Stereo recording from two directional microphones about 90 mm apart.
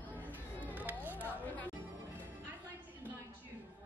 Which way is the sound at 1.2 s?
20° left (ahead or behind).